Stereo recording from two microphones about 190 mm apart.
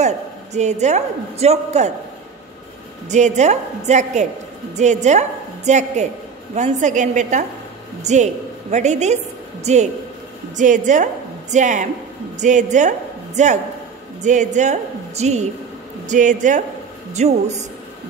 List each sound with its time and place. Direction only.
0.0 s a woman's voice: 35° right (ahead or behind)
3.1 s a woman's voice: 40° right (ahead or behind)